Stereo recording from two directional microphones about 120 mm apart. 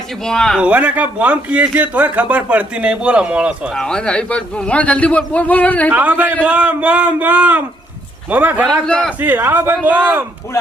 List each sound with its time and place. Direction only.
0.3 s speech: 5° left (ahead or behind)
0.6 s speech: 10° right (ahead or behind)
3.8 s a man's voice: 5° left (ahead or behind)
5.9 s speech: 15° right (ahead or behind)
8.9 s a man's voice: 10° left (ahead or behind)
9.2 s speech: 15° right (ahead or behind)